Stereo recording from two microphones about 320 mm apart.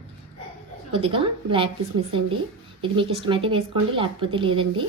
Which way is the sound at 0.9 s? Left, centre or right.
Centre.